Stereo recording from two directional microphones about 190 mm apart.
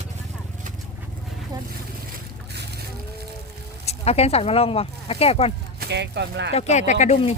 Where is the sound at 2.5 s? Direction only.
60° right (ahead or behind).